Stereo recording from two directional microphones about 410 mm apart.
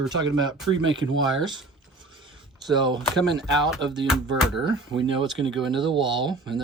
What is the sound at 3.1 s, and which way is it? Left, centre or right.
Speech, centre.